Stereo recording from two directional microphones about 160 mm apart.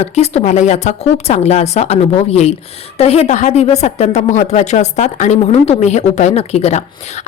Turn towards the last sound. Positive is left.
turn(degrees=40)  # may be behind; listen again after turning